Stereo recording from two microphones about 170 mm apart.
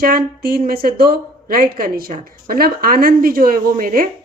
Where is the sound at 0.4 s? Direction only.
60° right (ahead or behind).